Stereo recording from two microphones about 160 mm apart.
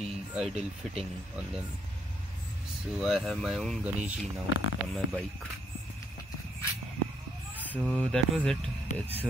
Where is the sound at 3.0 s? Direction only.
Centre (ahead or behind).